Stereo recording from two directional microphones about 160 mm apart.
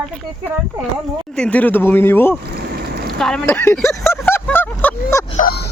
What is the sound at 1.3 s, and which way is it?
Speech, 10° left (ahead or behind).